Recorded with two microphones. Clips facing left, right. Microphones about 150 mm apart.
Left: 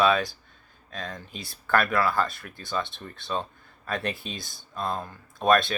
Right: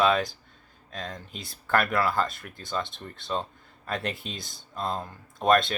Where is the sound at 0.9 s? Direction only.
25° right (ahead or behind).